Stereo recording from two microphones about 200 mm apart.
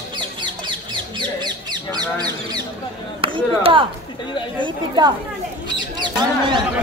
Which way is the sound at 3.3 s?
25° right (ahead or behind).